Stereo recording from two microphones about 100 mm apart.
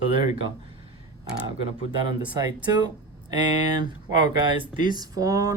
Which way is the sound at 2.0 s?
45° right (ahead or behind).